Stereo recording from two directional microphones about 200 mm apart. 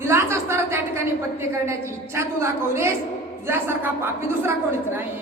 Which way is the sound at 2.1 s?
15° right (ahead or behind).